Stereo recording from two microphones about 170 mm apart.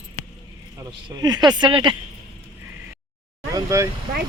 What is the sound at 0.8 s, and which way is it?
Speech, 25° right (ahead or behind).